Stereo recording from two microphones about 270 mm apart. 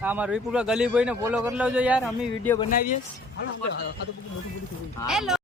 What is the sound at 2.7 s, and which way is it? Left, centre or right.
Speech, left.